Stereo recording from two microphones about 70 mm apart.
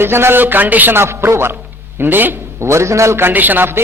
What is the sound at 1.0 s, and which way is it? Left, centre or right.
A woman's voice, right.